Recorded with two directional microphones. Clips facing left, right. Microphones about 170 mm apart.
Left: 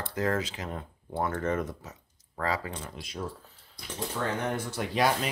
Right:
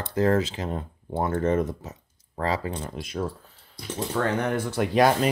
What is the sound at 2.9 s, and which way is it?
Speech, 50° right (ahead or behind).